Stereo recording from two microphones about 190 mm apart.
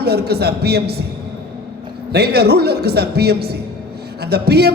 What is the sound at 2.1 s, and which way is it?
A man's voice, 55° right (ahead or behind).